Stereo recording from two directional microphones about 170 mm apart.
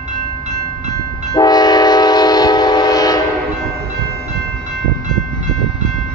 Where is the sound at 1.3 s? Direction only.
25° left (ahead or behind).